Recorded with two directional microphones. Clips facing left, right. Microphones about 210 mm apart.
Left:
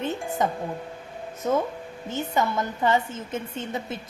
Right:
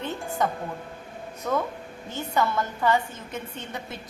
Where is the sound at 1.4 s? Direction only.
20° left (ahead or behind).